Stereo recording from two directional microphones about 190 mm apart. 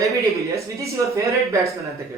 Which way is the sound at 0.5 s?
15° right (ahead or behind).